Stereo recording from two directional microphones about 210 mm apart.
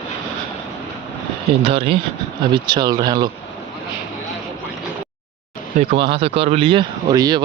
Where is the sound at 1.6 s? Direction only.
25° right (ahead or behind).